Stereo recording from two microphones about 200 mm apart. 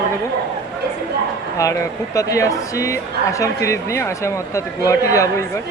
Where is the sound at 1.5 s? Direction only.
15° left (ahead or behind).